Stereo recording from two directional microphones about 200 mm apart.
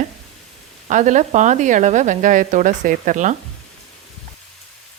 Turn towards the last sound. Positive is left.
turn(degrees=-40)  # may be behind; listen again after turning